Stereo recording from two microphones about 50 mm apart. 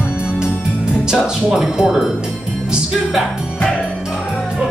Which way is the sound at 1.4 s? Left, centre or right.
Centre.